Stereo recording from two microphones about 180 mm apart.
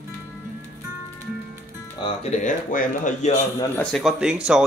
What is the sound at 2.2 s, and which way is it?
Speech, 40° left (ahead or behind).